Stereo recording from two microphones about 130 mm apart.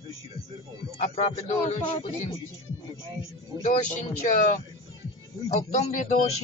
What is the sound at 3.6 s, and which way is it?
Speech, 65° left (ahead or behind).